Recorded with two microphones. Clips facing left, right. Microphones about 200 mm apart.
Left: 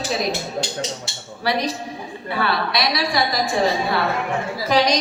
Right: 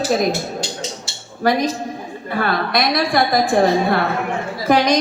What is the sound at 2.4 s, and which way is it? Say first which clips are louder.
Music: right 3 dB; 50° right (ahead or behind).